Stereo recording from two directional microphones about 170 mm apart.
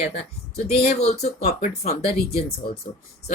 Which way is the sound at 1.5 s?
55° left (ahead or behind).